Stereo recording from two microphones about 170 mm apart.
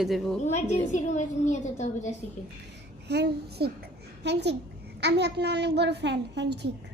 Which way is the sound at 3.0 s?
80° right.